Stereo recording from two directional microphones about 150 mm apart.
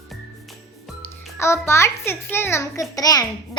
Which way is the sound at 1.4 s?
20° left (ahead or behind).